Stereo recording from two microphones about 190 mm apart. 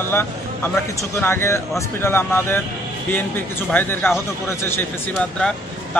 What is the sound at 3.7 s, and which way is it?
Speech, 10° left (ahead or behind).